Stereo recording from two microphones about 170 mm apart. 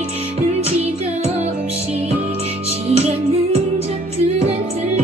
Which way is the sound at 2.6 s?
35° right (ahead or behind).